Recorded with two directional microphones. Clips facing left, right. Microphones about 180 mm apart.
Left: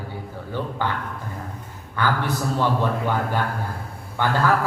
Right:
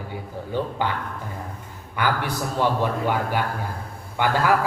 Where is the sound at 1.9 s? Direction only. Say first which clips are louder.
Left 1 dB; 15° right (ahead or behind).